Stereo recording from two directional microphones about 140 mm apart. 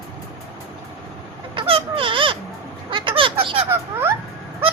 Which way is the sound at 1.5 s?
40° right (ahead or behind).